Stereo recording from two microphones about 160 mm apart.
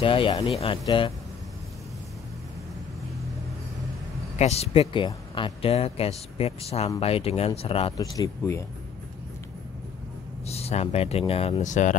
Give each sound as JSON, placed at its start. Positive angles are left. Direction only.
{"t": 0.0, "sound": "speech", "side_deg": 35}
{"t": 4.4, "sound": "speech", "side_deg": 40}
{"t": 8.0, "sound": "speech", "side_deg": 20}
{"t": 10.4, "sound": "speech", "side_deg": 40}